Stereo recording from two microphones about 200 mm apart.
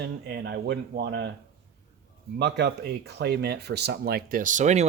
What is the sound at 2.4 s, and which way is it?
Speech, 55° right (ahead or behind).